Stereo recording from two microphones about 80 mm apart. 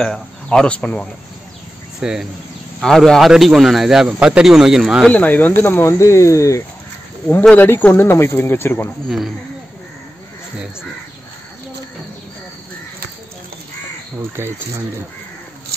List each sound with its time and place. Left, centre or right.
0.0 s speech: centre
2.0 s cricket: centre
2.8 s speech: centre
5.1 s speech: left
5.6 s speech: left
7.5 s speech: left
14.3 s speech: right